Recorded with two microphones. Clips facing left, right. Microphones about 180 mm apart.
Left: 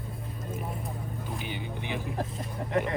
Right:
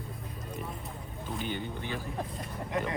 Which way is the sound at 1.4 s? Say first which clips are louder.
Even; 15° left (ahead or behind).